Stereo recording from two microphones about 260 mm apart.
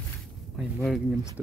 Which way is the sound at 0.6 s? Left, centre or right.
Centre.